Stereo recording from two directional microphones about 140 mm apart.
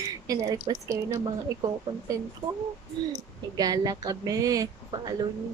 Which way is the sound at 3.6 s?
25° right (ahead or behind).